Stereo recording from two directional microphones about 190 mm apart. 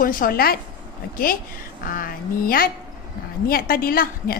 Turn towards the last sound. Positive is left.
turn(degrees=50)  # may be behind; listen again after turning